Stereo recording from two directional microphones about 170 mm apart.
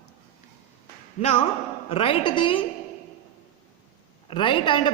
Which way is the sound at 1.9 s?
35° left (ahead or behind).